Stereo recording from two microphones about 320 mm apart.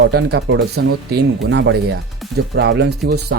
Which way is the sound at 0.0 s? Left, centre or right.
Right.